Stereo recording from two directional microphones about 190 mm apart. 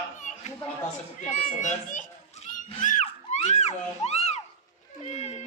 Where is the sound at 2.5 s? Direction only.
40° left (ahead or behind).